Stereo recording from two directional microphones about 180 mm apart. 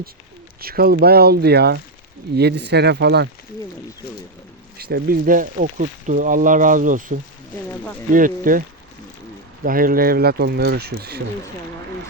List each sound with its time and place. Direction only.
0.6 s speech: 55° right (ahead or behind)
4.8 s speech: 60° right (ahead or behind)
9.6 s speech: 50° right (ahead or behind)